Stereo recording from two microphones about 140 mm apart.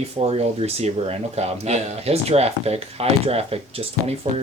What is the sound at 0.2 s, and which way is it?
Speech, 45° right (ahead or behind).